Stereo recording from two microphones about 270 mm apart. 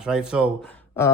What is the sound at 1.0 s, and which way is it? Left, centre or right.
Speech, centre.